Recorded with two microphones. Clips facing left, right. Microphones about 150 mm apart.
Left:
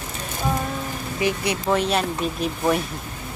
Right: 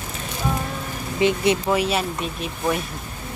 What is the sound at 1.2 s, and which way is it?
Speech, 25° right (ahead or behind).